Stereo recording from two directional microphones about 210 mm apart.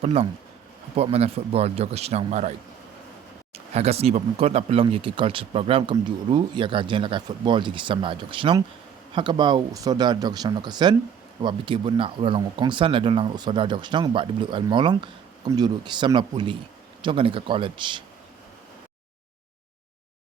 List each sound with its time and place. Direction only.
0.0 s speech: 30° right (ahead or behind)
3.5 s speech: 30° right (ahead or behind)